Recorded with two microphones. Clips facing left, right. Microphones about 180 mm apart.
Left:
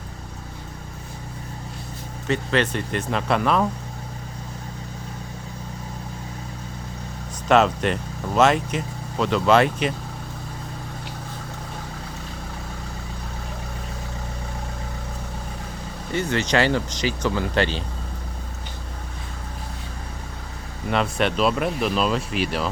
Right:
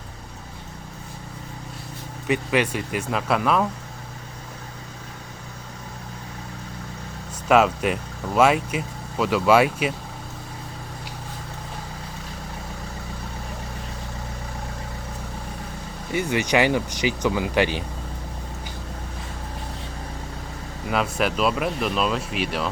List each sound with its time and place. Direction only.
2.2 s speech: 10° right (ahead or behind)
7.4 s speech: 5° right (ahead or behind)
16.1 s speech: 10° right (ahead or behind)
20.8 s speech: 5° right (ahead or behind)